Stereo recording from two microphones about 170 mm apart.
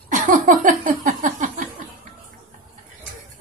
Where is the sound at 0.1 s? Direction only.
50° right (ahead or behind).